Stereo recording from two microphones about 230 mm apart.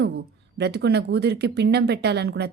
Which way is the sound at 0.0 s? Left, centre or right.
Right.